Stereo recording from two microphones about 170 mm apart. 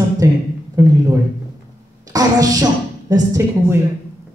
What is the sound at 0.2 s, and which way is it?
Speech, 20° right (ahead or behind).